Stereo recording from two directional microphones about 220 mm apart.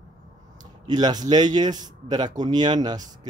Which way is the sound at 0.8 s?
20° right (ahead or behind).